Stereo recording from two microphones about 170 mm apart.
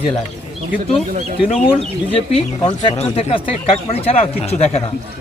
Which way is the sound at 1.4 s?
35° left (ahead or behind).